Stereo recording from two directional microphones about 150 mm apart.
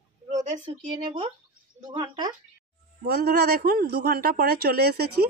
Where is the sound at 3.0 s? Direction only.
90° right.